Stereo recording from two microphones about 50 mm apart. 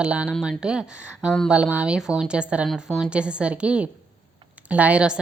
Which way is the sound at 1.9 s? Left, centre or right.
Centre.